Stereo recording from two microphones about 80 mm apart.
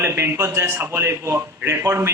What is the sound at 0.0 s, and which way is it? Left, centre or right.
A man's voice, right.